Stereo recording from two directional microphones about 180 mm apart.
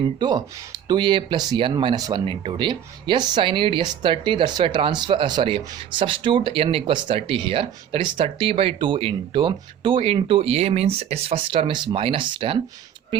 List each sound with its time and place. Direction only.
0.2 s speech: 25° right (ahead or behind)